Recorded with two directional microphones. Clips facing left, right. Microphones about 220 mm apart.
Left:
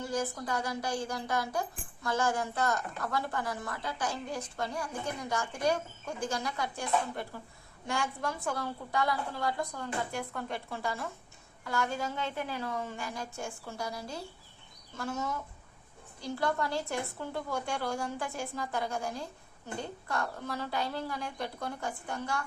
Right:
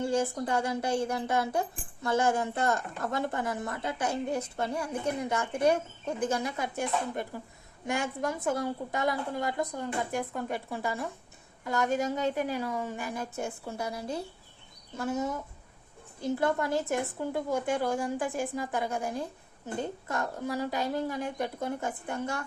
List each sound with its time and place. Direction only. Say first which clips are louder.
0.0 s a woman's voice: right 5 dB; 25° right (ahead or behind)
16.4 s a woman's voice: right 2 dB; 20° right (ahead or behind)